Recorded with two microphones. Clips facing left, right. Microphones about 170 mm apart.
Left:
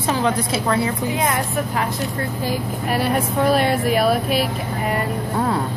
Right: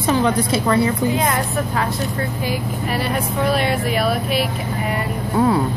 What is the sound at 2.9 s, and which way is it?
Speech, 45° left (ahead or behind).